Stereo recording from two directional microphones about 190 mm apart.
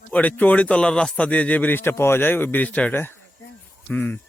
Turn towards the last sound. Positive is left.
turn(degrees=10)  # may be behind; listen again after turning